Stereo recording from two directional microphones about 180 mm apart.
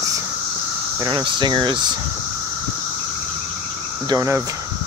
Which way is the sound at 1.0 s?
25° right (ahead or behind).